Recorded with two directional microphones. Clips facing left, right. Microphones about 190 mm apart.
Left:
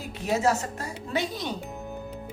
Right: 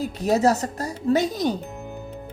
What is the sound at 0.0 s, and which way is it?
Speech, 40° right (ahead or behind).